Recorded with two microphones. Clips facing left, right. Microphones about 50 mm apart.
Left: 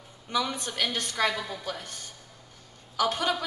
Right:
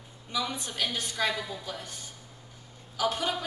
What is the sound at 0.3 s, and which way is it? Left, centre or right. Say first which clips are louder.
A woman's voice: left 3 dB; left.